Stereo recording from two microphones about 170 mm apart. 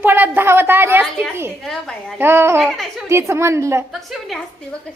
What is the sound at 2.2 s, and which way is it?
Speech, 15° right (ahead or behind).